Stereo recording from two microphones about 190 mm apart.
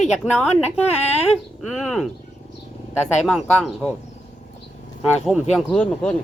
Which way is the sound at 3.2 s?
5° left (ahead or behind).